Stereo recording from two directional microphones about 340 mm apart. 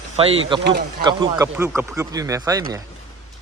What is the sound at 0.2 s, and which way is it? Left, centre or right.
Speech, centre.